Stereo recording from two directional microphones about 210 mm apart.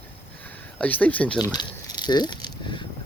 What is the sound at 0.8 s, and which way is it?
Speech, 5° left (ahead or behind).